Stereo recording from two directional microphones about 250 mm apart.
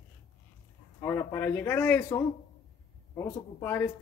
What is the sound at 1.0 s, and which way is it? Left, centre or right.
Speech, centre.